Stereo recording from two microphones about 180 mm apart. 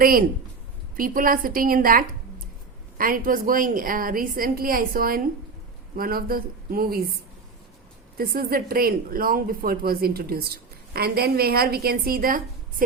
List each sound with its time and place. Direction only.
0.0 s a woman's voice: 55° right (ahead or behind)
8.2 s speech: 55° right (ahead or behind)